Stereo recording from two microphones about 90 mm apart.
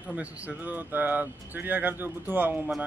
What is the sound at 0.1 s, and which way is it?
Speech, 15° right (ahead or behind).